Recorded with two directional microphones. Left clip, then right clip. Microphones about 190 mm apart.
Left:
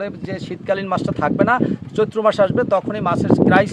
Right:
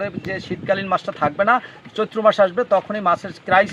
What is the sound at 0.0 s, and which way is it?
Speech, 30° left (ahead or behind).